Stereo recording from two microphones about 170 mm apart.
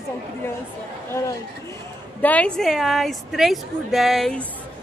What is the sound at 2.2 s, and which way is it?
Speech, 10° left (ahead or behind).